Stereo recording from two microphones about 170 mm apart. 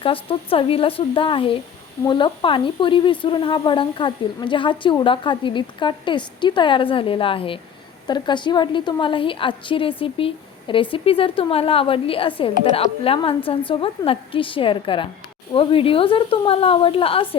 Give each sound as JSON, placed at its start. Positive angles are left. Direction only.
{"t": 0.0, "sound": "speech", "side_deg": 30}